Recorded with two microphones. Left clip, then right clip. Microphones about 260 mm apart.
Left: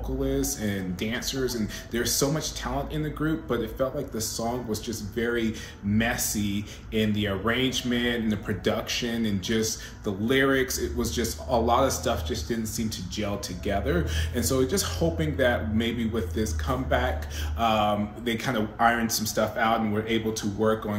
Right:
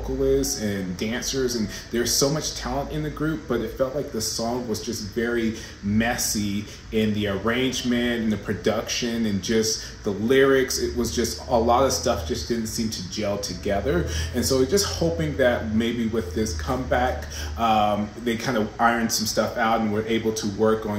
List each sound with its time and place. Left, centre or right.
0.4 s speech: centre
4.8 s speech: centre